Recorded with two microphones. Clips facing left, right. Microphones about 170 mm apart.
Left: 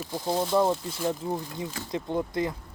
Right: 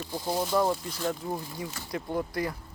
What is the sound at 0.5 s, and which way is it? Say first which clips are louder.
Speech: left 3 dB; 25° left (ahead or behind).